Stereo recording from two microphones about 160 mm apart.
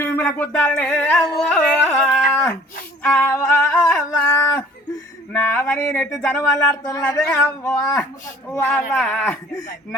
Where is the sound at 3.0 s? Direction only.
10° left (ahead or behind).